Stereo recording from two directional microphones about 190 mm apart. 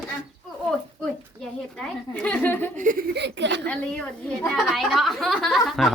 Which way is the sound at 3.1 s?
65° right (ahead or behind).